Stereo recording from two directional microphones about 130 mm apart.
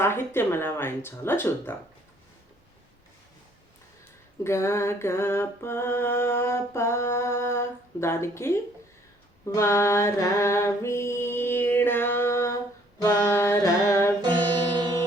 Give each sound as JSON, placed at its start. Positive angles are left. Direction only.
{"t": 0.0, "sound": "speech", "side_deg": 20}
{"t": 4.4, "sound": "music", "side_deg": 20}
{"t": 9.6, "sound": "music", "side_deg": 20}
{"t": 14.7, "sound": "music", "side_deg": -35}